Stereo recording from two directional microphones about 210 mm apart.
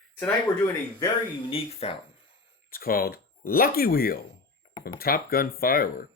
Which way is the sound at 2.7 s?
45° left (ahead or behind).